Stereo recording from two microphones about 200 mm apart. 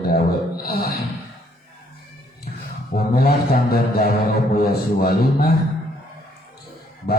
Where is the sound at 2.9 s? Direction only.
50° left (ahead or behind).